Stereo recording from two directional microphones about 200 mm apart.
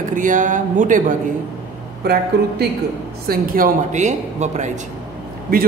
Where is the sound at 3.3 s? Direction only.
45° right (ahead or behind).